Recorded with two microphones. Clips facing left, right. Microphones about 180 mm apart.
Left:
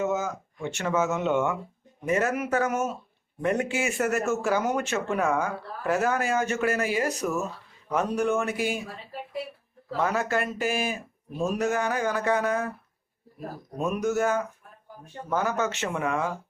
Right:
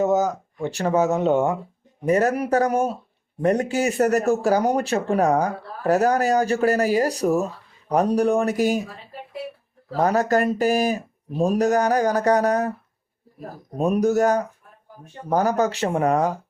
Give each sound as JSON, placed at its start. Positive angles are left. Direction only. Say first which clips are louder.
{"t": 0.0, "sound": "speech", "louder": "right 7 dB", "side_deg": -40}
{"t": 9.9, "sound": "speech", "louder": "right 7 dB", "side_deg": -40}
{"t": 13.7, "sound": "speech", "louder": "right 7 dB", "side_deg": -35}